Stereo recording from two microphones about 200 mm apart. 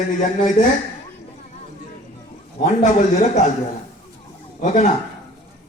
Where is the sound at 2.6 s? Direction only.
35° left (ahead or behind).